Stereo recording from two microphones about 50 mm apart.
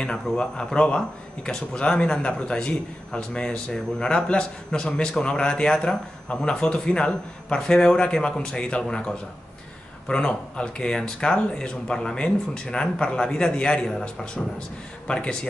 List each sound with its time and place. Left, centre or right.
0.0 s a man's voice: centre
15.0 s a man's voice: left